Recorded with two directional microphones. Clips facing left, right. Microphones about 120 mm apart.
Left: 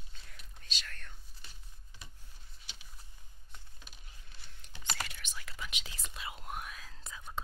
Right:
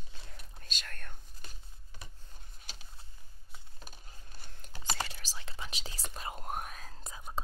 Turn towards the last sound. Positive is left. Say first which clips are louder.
# right 2 dB
turn(degrees=-40)  # may be behind; listen again after turning